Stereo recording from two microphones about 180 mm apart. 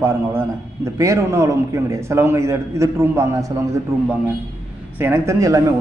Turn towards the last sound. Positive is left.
turn(degrees=-15)  # may be behind; listen again after turning